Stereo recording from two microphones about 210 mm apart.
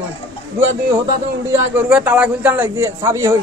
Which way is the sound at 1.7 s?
5° right (ahead or behind).